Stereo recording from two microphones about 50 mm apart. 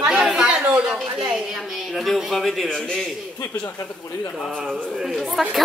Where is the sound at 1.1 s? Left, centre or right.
Centre.